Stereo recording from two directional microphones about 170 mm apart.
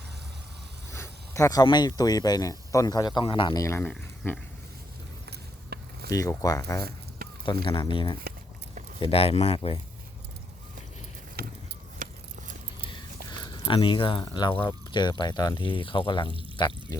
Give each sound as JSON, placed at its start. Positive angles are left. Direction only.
{"t": 0.9, "sound": "speech", "side_deg": 15}
{"t": 4.2, "sound": "dog", "side_deg": 15}
{"t": 5.7, "sound": "a sound", "side_deg": -70}
{"t": 6.1, "sound": "speech", "side_deg": 20}
{"t": 11.9, "sound": "vehicle", "side_deg": -50}
{"t": 13.4, "sound": "speech", "side_deg": 25}
{"t": 16.6, "sound": "music", "side_deg": 25}